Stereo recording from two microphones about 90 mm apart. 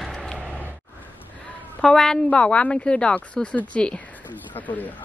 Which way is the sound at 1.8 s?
5° left (ahead or behind).